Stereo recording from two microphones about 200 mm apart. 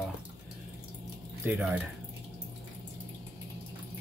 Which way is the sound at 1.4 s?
5° right (ahead or behind).